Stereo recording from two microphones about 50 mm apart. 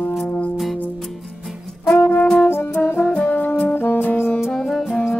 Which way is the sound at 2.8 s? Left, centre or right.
Left.